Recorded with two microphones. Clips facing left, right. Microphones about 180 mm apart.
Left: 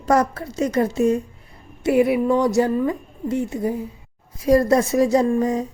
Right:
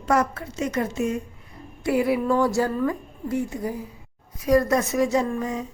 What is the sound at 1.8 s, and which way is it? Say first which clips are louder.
A woman's voice: left 4 dB; 20° left (ahead or behind).